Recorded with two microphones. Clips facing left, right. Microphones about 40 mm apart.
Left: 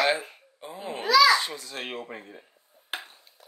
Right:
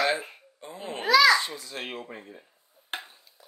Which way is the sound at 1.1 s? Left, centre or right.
Right.